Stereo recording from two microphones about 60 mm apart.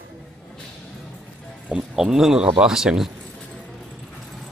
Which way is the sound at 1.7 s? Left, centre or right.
Centre.